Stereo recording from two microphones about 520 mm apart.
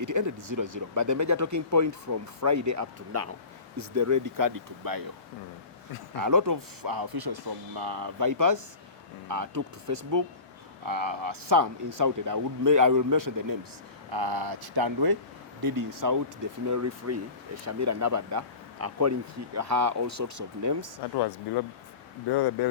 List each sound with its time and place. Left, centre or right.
0.0 s speech: right
6.1 s speech: right
21.2 s speech: left